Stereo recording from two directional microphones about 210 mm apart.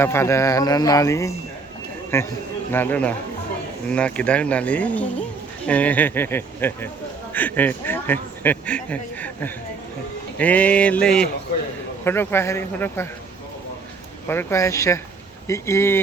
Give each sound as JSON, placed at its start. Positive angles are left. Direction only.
{"t": 0.0, "sound": "speech", "side_deg": 10}
{"t": 14.3, "sound": "speech", "side_deg": 10}